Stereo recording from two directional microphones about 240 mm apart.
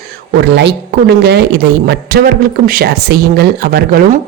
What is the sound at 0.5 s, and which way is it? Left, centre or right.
A man's voice, right.